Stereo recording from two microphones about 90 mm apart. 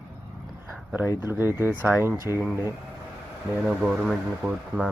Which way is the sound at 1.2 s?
25° right (ahead or behind).